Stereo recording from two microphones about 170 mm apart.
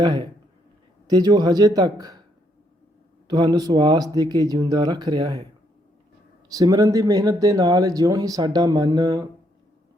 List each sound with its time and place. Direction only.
0.0 s speech: 25° right (ahead or behind)
3.2 s speech: 20° right (ahead or behind)
6.5 s speech: 20° right (ahead or behind)